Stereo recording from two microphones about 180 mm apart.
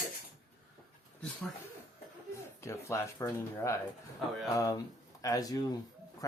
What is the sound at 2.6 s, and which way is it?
Speech, 15° left (ahead or behind).